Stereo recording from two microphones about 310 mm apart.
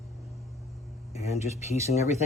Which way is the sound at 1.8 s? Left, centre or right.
Left.